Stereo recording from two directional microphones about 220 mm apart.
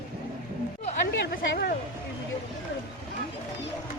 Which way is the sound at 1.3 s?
40° left (ahead or behind).